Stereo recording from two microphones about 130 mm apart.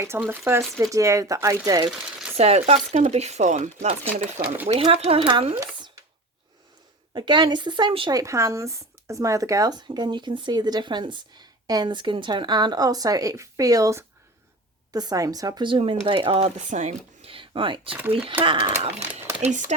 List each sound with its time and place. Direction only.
0.0 s speech: 20° right (ahead or behind)
1.9 s speech: 5° right (ahead or behind)
2.4 s speech: 55° right (ahead or behind)
4.4 s speech: 15° right (ahead or behind)
4.7 s speech: 50° right (ahead or behind)
7.1 s speech: 35° right (ahead or behind)
8.2 s speech: 25° right (ahead or behind); by 16.5 s 45° right (ahead or behind)
16.6 s speech: 70° right (ahead or behind)
16.8 s speech: 50° right (ahead or behind)
19.4 s speech: 70° right (ahead or behind)